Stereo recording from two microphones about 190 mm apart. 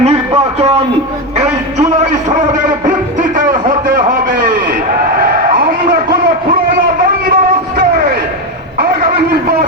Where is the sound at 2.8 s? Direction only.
45° right (ahead or behind).